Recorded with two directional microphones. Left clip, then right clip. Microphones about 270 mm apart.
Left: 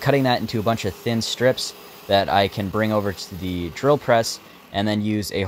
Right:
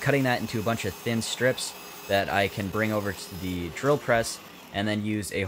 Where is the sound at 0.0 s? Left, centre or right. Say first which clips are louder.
Left 5 dB; centre.